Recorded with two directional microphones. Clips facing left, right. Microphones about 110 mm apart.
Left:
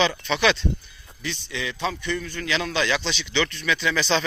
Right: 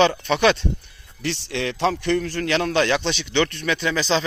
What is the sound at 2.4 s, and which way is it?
Speech, 55° right (ahead or behind).